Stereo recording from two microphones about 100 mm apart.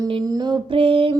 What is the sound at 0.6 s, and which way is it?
Mantra, 65° right (ahead or behind).